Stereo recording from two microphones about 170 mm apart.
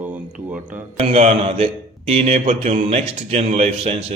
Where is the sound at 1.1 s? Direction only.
40° right (ahead or behind).